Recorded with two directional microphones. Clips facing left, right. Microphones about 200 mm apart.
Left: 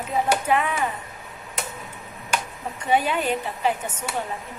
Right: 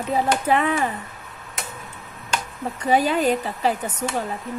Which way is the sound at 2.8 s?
35° right (ahead or behind).